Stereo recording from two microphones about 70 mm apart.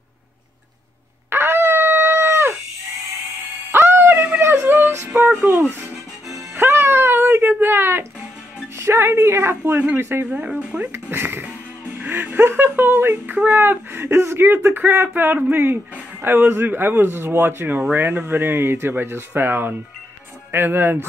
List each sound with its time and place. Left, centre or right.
1.3 s dog: right
3.7 s a sound: right
4.4 s music: right
5.4 s speech: right
6.5 s music: right
8.7 s speech: right
10.3 s speech: centre
10.9 s a sound: right
12.1 s speech: right